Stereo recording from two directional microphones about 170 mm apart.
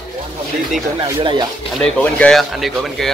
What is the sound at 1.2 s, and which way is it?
Speech, 25° right (ahead or behind).